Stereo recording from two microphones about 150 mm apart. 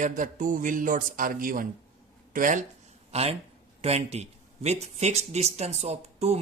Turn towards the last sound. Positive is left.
turn(degrees=-45)  # may be behind; listen again after turning